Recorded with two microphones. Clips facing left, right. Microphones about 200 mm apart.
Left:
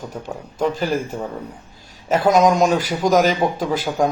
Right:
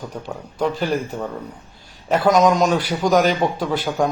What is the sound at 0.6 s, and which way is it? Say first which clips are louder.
Speech: left 1 dB; centre (ahead or behind).